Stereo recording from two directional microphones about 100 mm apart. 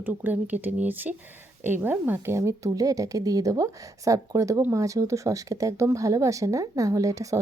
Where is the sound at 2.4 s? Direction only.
30° right (ahead or behind).